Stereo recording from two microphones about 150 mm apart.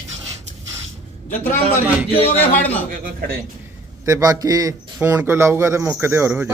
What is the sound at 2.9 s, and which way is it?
Speech, 75° right (ahead or behind).